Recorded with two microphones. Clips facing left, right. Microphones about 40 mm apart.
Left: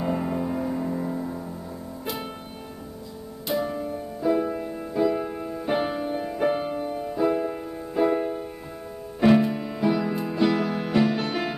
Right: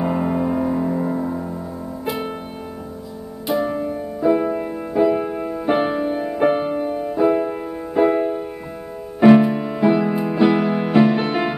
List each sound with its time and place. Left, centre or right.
0.0 s music: right
3.4 s music: centre